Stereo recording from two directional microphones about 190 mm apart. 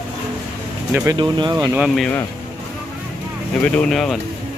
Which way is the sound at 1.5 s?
10° right (ahead or behind).